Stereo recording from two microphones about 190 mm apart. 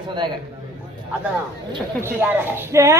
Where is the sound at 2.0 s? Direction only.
15° right (ahead or behind).